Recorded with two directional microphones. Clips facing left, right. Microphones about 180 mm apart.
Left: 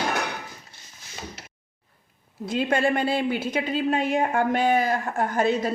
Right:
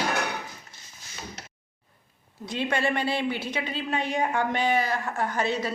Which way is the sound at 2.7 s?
50° left (ahead or behind).